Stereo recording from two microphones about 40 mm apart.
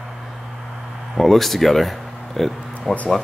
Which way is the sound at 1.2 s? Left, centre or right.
Centre.